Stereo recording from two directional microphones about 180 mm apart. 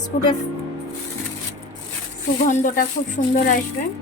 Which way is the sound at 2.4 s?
45° left (ahead or behind).